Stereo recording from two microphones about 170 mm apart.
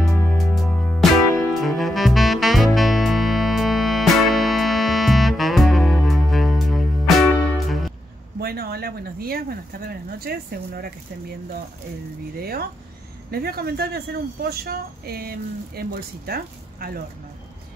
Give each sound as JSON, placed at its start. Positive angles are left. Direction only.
{"t": 0.1, "sound": "music", "side_deg": 10}
{"t": 8.4, "sound": "a sound", "side_deg": -65}
{"t": 12.4, "sound": "speech", "side_deg": -65}